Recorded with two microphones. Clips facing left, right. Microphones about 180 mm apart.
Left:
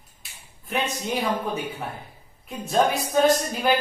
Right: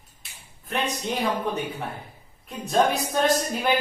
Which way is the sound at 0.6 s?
Centre (ahead or behind).